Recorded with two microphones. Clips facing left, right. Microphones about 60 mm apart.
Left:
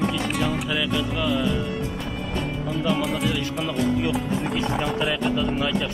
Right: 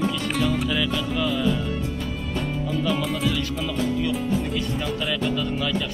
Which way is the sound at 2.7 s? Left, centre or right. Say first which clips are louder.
Left 2 dB; centre.